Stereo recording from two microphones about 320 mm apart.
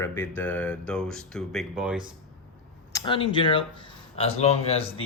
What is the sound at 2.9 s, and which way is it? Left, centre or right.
Speech, centre.